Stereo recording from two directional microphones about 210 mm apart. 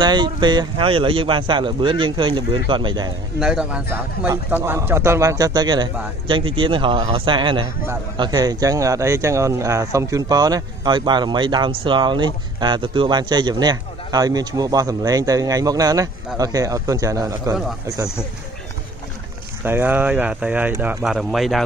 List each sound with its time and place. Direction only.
0.0 s speech: 20° right (ahead or behind)
3.3 s speech: 5° right (ahead or behind)
19.6 s speech: 10° right (ahead or behind)